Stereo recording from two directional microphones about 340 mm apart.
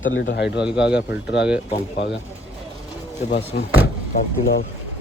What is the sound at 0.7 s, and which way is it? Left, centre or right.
Speech, centre.